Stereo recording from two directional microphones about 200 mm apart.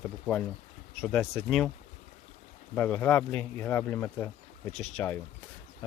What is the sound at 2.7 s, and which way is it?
Speech, 5° left (ahead or behind).